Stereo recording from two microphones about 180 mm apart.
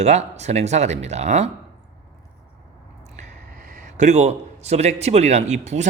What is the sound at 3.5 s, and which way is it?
A man's voice, 50° right (ahead or behind).